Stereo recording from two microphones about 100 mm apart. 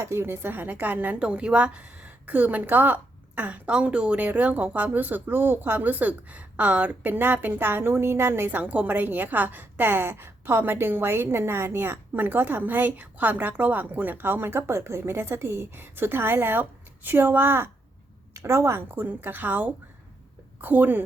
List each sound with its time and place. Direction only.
0.0 s a woman's voice: 25° right (ahead or behind)